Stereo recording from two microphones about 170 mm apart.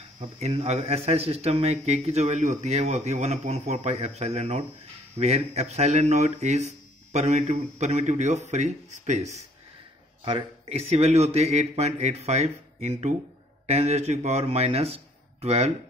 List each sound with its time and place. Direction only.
0.2 s a man's voice: 40° right (ahead or behind)